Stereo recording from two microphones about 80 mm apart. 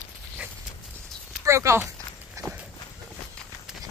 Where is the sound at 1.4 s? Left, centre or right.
Right.